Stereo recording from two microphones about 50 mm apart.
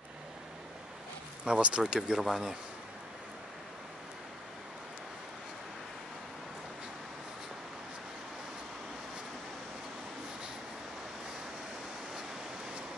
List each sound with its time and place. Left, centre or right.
1.4 s speech: centre